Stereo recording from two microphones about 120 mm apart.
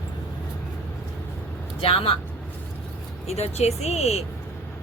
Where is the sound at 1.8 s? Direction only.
50° left (ahead or behind).